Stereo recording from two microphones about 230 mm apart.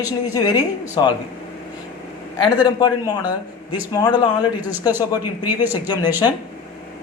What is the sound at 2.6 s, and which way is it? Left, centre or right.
Speech, centre.